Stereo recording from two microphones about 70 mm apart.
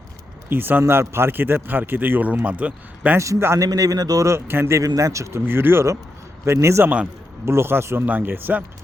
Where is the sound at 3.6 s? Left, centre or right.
Right.